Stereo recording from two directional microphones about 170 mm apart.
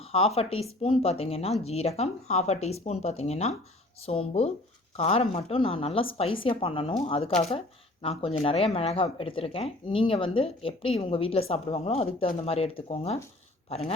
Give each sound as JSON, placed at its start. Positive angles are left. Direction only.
{"t": 0.0, "sound": "speech", "side_deg": 35}